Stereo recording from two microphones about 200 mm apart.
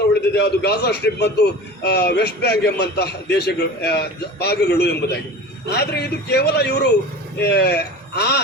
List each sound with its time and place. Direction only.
0.3 s a man's voice: 55° left (ahead or behind)